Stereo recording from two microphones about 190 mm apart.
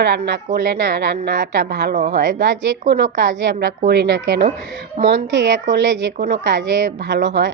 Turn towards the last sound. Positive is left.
turn(degrees=-65)  # may be behind; listen again after turning